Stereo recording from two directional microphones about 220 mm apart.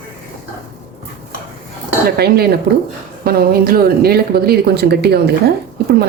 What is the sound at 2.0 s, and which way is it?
Speech, 45° right (ahead or behind).